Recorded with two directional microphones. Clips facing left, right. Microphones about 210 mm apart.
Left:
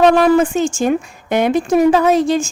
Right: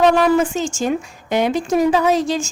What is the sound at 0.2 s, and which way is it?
A woman's voice, 55° left (ahead or behind).